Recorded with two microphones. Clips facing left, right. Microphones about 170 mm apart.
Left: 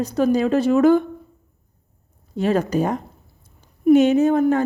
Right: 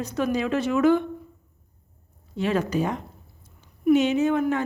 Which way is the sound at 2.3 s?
40° left (ahead or behind).